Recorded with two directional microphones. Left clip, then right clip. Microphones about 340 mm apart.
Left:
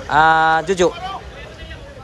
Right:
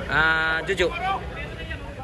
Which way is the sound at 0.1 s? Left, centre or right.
Centre.